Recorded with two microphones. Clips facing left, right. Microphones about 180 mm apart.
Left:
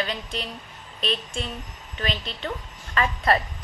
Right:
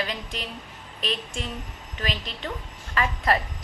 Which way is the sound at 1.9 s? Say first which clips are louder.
Left 2 dB; 25° left (ahead or behind).